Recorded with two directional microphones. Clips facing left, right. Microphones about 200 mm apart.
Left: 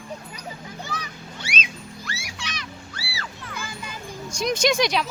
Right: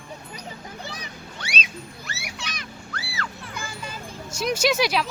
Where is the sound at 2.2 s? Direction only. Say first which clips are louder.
Even; 55° right (ahead or behind).